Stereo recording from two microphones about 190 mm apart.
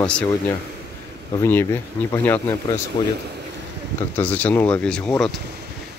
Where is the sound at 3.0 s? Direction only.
25° left (ahead or behind).